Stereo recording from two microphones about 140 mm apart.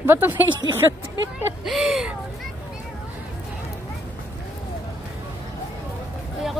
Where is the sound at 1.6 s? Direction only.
Centre (ahead or behind).